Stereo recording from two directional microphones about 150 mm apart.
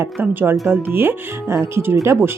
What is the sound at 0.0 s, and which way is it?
Speech, 15° right (ahead or behind).